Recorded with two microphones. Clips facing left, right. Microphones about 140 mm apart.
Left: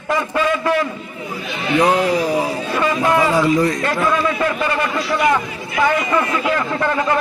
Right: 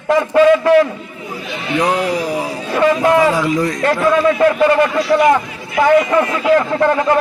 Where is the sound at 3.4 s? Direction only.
Centre (ahead or behind).